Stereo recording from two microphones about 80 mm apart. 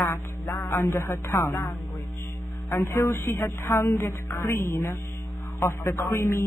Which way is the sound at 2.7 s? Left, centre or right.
Left.